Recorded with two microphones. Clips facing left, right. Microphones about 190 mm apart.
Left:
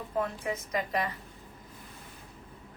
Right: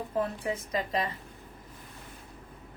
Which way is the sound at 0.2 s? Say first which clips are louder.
Right 1 dB; 30° right (ahead or behind).